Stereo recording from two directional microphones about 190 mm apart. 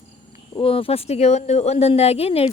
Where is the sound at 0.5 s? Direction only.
30° left (ahead or behind).